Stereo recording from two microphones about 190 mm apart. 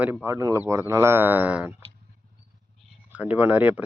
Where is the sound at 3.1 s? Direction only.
10° right (ahead or behind).